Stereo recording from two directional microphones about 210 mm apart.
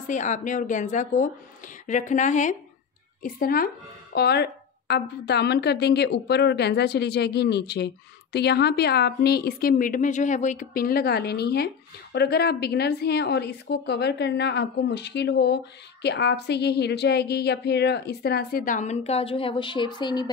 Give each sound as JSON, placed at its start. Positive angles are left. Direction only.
{"t": 0.0, "sound": "a woman's voice", "side_deg": 35}